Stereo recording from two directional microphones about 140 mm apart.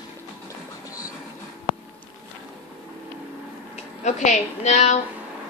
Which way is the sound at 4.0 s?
60° left (ahead or behind).